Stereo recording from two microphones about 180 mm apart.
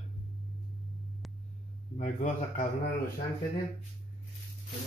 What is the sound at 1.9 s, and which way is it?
Speech, 45° left (ahead or behind).